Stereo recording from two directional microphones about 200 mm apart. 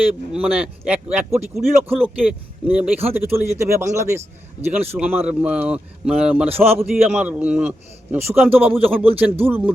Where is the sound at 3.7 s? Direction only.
15° right (ahead or behind).